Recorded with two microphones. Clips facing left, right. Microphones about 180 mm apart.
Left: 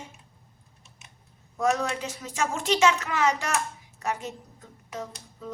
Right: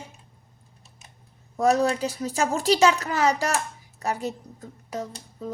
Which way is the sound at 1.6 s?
35° right (ahead or behind).